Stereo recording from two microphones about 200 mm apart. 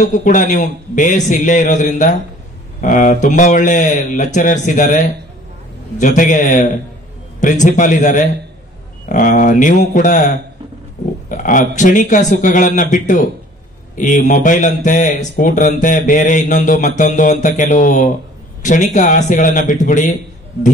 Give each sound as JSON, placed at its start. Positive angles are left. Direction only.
{"t": 0.0, "sound": "speech", "side_deg": 40}